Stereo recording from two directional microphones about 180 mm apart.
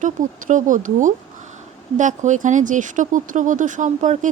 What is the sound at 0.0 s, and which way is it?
Speech, 45° right (ahead or behind).